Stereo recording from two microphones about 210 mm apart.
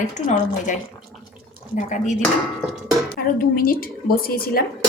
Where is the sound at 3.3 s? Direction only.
45° left (ahead or behind).